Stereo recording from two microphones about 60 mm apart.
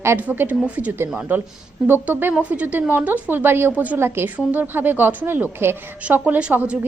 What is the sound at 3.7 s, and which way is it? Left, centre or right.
Speech, right.